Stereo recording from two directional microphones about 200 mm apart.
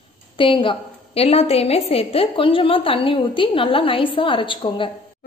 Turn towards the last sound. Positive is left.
turn(degrees=25)  # may be behind; listen again after turning